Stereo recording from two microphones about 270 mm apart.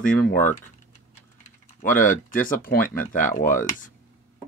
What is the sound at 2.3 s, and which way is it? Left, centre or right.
Speech, left.